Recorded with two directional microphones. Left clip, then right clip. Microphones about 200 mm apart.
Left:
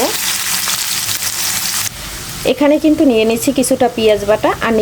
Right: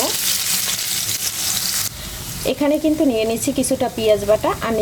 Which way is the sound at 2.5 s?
15° left (ahead or behind).